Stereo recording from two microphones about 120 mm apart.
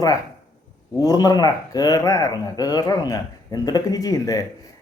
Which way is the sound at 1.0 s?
30° left (ahead or behind).